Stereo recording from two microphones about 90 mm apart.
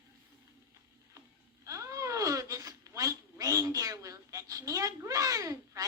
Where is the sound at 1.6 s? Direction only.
35° right (ahead or behind).